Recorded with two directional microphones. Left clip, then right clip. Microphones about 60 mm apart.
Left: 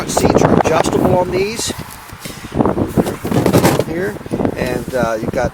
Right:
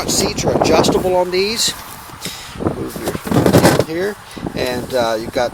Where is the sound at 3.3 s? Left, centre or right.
Left.